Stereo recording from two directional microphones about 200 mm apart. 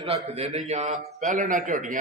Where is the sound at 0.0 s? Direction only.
30° right (ahead or behind).